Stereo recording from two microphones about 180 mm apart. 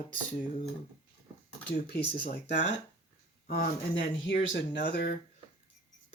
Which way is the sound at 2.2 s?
65° left (ahead or behind).